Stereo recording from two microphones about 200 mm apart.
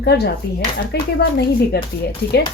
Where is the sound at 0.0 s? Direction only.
55° left (ahead or behind).